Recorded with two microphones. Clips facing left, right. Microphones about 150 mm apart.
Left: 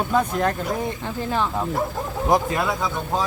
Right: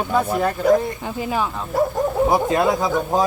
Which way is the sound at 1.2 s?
10° right (ahead or behind).